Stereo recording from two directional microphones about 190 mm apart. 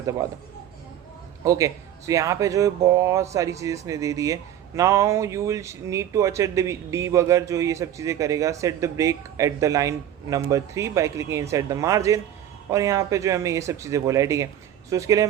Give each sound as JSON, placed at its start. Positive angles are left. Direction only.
{"t": 1.5, "sound": "speech", "side_deg": -15}